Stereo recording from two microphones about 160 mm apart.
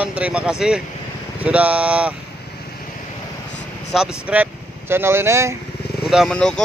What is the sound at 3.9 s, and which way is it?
Speech, 5° right (ahead or behind).